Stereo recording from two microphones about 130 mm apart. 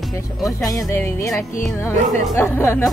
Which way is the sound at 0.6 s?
25° left (ahead or behind).